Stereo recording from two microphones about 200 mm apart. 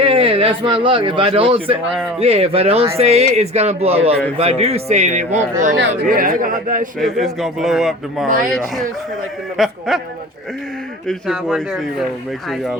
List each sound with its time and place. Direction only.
0.0 s a man's voice: 25° right (ahead or behind)
7.0 s a man's voice: centre (ahead or behind)
11.1 s a man's voice: centre (ahead or behind)